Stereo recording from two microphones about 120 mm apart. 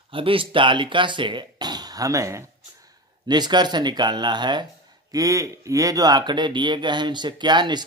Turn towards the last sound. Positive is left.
turn(degrees=-40)  # may be behind; listen again after turning